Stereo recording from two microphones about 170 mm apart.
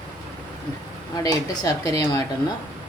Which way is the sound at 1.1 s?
20° left (ahead or behind).